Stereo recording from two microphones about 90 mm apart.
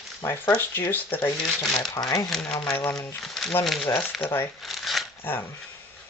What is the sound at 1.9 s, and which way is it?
Speech, 45° left (ahead or behind).